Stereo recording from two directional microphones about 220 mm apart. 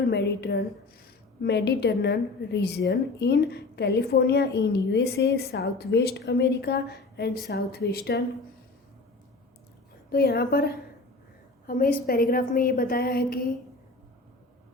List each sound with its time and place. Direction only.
0.0 s a woman's voice: 50° left (ahead or behind)
10.1 s a woman's voice: 45° left (ahead or behind)